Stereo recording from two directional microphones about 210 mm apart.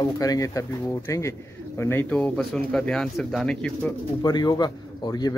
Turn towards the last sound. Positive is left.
turn(degrees=20)  # may be behind; listen again after turning